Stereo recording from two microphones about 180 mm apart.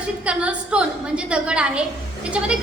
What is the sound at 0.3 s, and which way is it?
A woman's voice, 5° right (ahead or behind).